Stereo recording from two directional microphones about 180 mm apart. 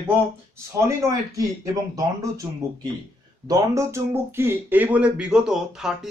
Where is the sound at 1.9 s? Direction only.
20° right (ahead or behind).